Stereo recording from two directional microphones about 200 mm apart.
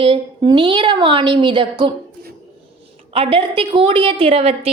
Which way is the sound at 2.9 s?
30° right (ahead or behind).